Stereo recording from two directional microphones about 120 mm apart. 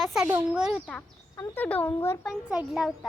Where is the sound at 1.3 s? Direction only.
20° left (ahead or behind).